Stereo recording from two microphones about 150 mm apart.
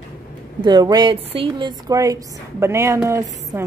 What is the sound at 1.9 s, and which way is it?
A woman's voice, 20° right (ahead or behind).